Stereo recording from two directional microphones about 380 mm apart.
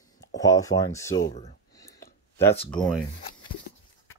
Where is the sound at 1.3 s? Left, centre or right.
Centre.